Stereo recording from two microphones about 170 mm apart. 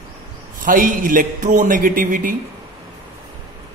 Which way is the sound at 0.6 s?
50° right (ahead or behind).